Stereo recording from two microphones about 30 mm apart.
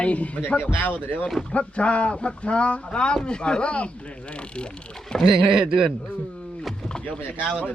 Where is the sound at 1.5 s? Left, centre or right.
Left.